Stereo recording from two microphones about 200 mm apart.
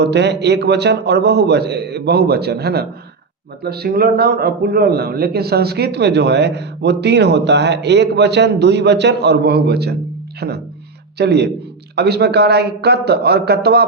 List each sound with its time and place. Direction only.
0.0 s a man's voice: 55° right (ahead or behind)